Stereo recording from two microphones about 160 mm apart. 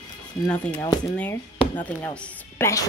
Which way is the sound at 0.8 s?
20° left (ahead or behind).